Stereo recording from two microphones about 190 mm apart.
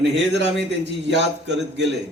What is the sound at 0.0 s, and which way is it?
A man's voice, 65° right (ahead or behind).